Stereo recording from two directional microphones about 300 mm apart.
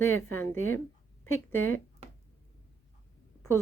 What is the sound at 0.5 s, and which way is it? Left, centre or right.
A woman's voice, left.